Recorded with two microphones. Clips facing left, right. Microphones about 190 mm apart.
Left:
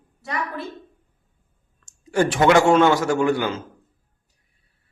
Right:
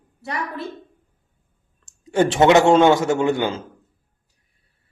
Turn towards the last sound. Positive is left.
turn(degrees=-25)  # may be behind; listen again after turning